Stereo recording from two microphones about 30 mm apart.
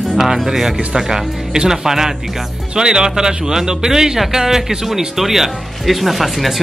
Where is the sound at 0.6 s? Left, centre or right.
Centre.